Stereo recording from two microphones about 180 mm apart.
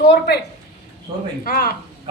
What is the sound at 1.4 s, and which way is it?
Speech, 55° left (ahead or behind).